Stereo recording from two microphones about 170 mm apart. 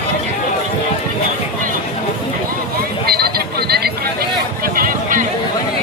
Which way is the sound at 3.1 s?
65° right (ahead or behind).